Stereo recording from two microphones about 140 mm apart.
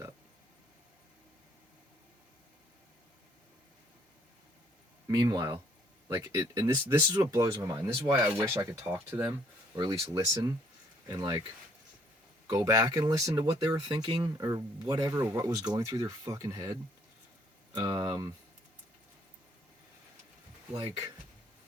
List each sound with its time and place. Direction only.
5.0 s speech: 30° right (ahead or behind)
12.5 s speech: 25° right (ahead or behind)
17.7 s speech: 25° right (ahead or behind)